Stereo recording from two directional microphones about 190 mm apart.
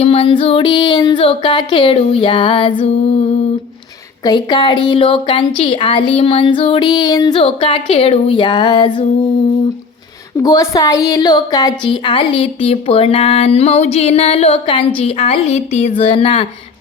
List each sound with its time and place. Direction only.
0.0 s a woman's voice: 30° left (ahead or behind)
4.2 s a woman's voice: 20° left (ahead or behind)
10.4 s a woman's voice: 15° left (ahead or behind)